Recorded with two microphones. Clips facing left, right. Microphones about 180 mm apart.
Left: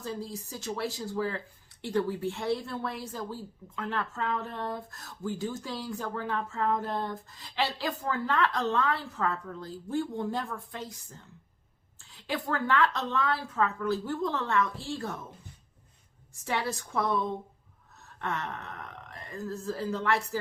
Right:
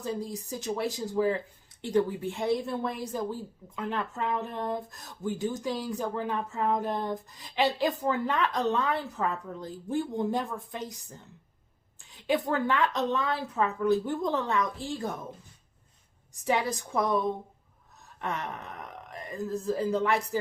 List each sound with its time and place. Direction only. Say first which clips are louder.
0.0 s a woman's voice: right 3 dB; 20° right (ahead or behind)
12.1 s a woman's voice: right 5 dB; 20° right (ahead or behind)
16.4 s a woman's voice: right 4 dB; 15° right (ahead or behind)
18.2 s a woman's voice: right 1 dB; 15° right (ahead or behind)